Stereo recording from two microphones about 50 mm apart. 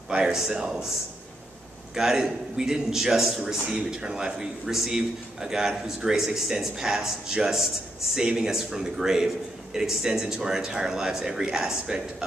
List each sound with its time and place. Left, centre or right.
0.1 s a man's voice: centre
2.0 s a man's voice: centre